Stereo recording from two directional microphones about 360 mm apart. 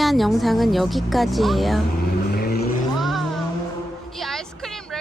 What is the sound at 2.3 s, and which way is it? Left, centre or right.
Vehicle, left.